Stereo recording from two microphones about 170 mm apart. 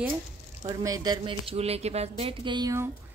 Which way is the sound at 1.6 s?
40° right (ahead or behind).